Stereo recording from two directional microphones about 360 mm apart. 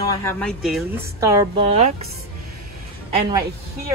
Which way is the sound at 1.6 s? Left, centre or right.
Centre.